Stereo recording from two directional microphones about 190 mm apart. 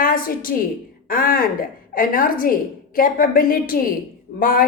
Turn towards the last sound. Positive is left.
turn(degrees=50)  # may be behind; listen again after turning